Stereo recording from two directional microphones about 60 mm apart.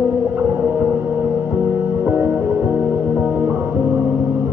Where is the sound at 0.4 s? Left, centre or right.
Right.